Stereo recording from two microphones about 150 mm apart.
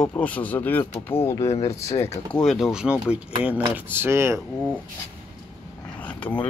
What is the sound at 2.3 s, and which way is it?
Speech, centre (ahead or behind).